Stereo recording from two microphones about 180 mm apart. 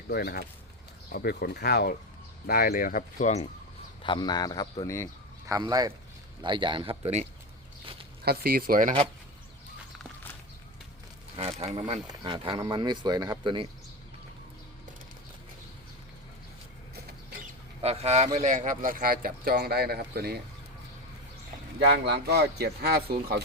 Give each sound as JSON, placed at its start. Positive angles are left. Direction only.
{"t": 0.1, "sound": "speech", "side_deg": 60}
{"t": 4.0, "sound": "speech", "side_deg": 25}
{"t": 5.5, "sound": "speech", "side_deg": -20}
{"t": 8.2, "sound": "speech", "side_deg": -60}
{"t": 11.3, "sound": "speech", "side_deg": -35}
{"t": 17.8, "sound": "speech", "side_deg": -35}
{"t": 21.8, "sound": "speech", "side_deg": -70}